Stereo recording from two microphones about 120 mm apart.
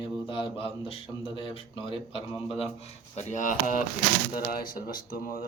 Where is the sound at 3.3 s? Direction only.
90° left.